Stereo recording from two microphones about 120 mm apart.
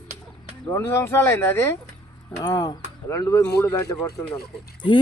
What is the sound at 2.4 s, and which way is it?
Speech, 30° left (ahead or behind).